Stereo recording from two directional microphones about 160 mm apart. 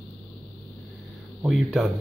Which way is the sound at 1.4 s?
Centre (ahead or behind).